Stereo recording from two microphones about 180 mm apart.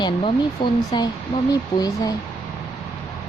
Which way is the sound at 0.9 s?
20° left (ahead or behind).